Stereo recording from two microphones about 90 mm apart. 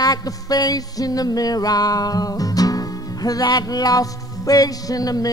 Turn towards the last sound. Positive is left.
turn(degrees=45)  # may be behind; listen again after turning